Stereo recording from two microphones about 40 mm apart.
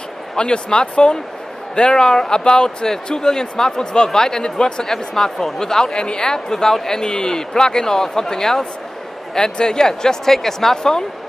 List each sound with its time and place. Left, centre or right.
0.4 s speech: left